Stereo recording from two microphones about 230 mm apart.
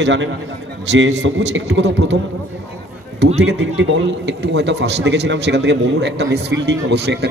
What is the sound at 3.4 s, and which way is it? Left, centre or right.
A man's voice, right.